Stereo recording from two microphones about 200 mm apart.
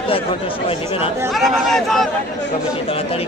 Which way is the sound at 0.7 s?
25° left (ahead or behind).